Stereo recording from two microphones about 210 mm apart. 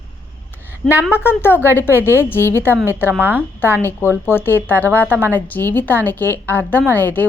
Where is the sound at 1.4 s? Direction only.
10° left (ahead or behind).